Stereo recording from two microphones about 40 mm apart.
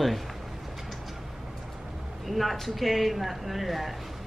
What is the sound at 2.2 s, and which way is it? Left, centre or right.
A woman's voice, centre.